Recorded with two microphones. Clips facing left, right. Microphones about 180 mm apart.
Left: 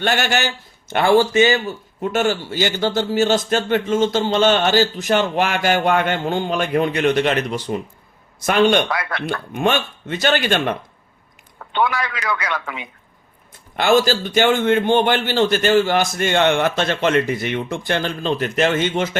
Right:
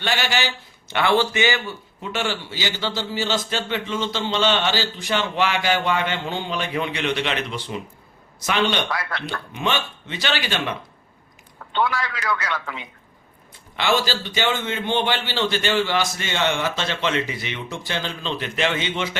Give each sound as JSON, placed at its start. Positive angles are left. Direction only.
{"t": 0.0, "sound": "a man's voice", "side_deg": 50}
{"t": 8.9, "sound": "a man's voice", "side_deg": 60}
{"t": 12.0, "sound": "a man's voice", "side_deg": 15}
{"t": 13.7, "sound": "a man's voice", "side_deg": 45}